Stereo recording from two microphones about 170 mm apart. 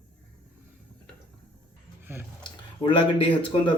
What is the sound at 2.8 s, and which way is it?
Speech, 30° left (ahead or behind).